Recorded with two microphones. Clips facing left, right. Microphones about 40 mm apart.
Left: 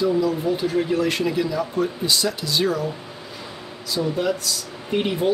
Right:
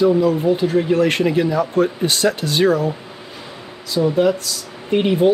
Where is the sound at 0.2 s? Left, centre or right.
Right.